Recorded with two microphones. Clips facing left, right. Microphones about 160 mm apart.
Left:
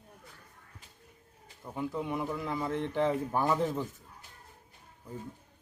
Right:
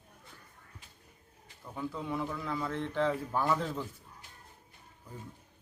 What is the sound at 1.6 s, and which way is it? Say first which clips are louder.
A man's voice: left 3 dB; 15° left (ahead or behind).